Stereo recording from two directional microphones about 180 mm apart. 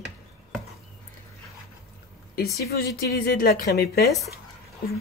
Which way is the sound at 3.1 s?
55° left (ahead or behind).